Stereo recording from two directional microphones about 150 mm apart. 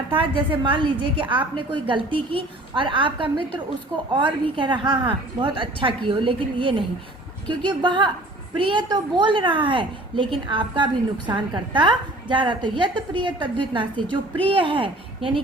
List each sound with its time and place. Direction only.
0.1 s a woman's voice: 35° right (ahead or behind)